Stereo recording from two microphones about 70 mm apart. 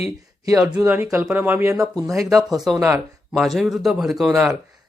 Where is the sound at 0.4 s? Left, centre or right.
Right.